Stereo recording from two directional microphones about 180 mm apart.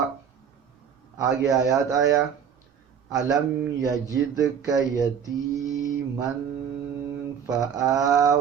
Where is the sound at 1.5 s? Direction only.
20° right (ahead or behind).